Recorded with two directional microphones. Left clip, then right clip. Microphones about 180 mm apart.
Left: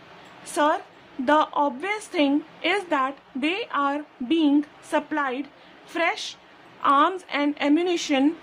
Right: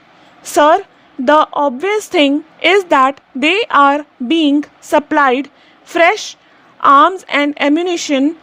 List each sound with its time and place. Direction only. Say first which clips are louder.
0.5 s a woman's voice: right 13 dB; 45° right (ahead or behind)